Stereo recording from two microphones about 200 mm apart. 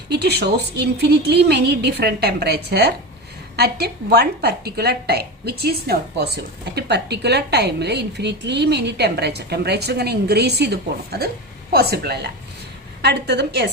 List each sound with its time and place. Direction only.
0.1 s a woman's voice: 55° right (ahead or behind)